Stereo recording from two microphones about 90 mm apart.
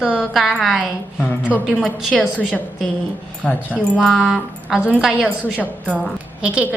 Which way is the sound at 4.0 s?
5° right (ahead or behind).